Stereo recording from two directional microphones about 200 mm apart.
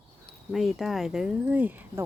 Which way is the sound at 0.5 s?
Centre (ahead or behind).